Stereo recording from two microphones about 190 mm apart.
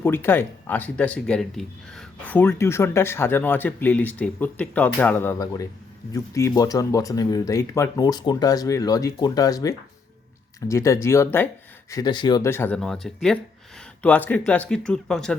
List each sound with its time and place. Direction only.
0.0 s speech: 10° left (ahead or behind)